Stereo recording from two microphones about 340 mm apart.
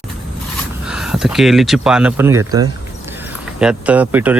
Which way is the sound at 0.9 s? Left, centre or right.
Centre.